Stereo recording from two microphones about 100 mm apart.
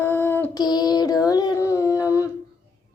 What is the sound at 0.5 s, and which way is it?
Music, 45° left (ahead or behind).